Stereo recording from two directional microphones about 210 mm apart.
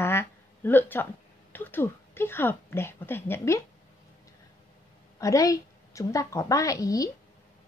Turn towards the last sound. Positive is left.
turn(degrees=15)  # may be behind; listen again after turning